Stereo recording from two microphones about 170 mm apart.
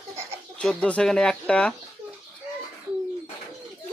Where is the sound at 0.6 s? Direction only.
5° left (ahead or behind).